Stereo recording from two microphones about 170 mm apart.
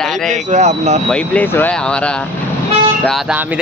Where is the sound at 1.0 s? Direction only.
5° left (ahead or behind).